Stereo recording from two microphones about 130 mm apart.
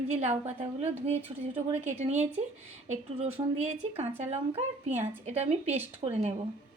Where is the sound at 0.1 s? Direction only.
55° right (ahead or behind).